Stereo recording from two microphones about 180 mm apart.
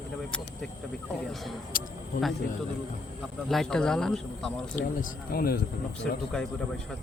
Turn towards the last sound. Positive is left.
turn(degrees=5)  # may be behind; listen again after turning